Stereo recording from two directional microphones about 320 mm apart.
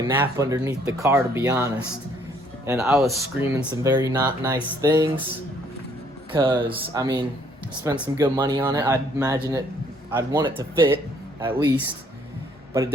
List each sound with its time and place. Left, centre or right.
0.1 s speech: centre
6.3 s speech: centre
12.7 s speech: centre